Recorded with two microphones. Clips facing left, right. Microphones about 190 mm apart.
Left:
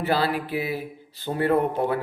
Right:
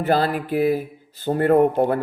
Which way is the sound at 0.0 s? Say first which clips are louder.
Right 4 dB; 45° right (ahead or behind).